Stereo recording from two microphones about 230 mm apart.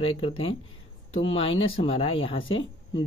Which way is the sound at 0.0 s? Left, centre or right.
Left.